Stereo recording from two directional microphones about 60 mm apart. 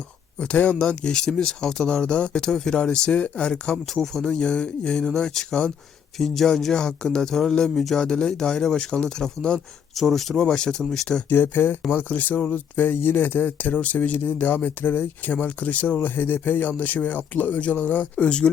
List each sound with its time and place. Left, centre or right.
0.3 s speech: left
9.9 s speech: centre
11.3 s speech: left; by 18.5 s centre